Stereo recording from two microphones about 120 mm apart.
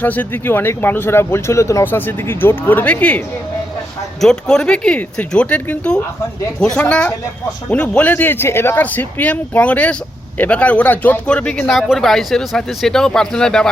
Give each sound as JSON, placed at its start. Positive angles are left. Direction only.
{"t": 0.0, "sound": "speech", "side_deg": 15}